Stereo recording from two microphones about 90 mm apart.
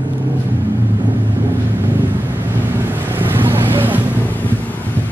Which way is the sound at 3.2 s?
25° right (ahead or behind).